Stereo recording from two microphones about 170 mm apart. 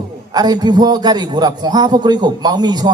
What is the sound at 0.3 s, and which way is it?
A man's voice, 25° right (ahead or behind).